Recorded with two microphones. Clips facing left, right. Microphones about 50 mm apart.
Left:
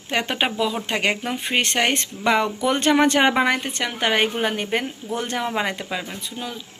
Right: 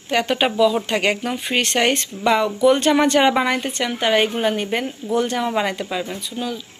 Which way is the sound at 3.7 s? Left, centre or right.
Left.